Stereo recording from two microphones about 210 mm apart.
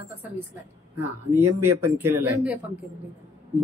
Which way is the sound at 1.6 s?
10° right (ahead or behind).